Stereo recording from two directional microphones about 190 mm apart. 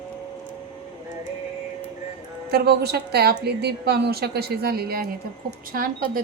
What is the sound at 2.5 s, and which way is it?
A woman's voice, 55° right (ahead or behind).